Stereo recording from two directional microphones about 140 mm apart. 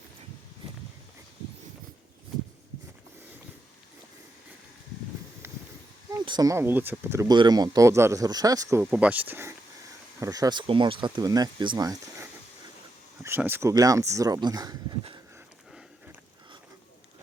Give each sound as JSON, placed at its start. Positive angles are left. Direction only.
{"t": 6.2, "sound": "speech", "side_deg": -30}
{"t": 7.3, "sound": "speech", "side_deg": -30}
{"t": 8.8, "sound": "speech", "side_deg": -10}